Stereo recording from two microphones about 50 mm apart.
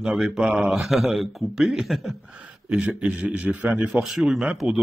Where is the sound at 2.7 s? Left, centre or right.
Right.